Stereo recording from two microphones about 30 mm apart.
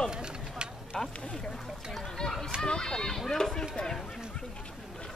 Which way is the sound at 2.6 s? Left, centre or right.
Left.